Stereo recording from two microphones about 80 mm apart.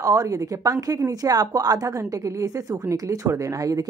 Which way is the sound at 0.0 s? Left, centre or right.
Right.